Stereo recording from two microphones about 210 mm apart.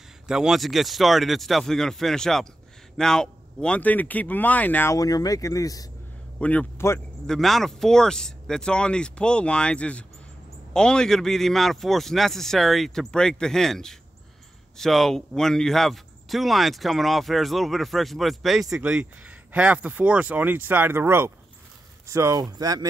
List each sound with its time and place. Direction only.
0.3 s speech: centre (ahead or behind); by 22.8 s 15° right (ahead or behind)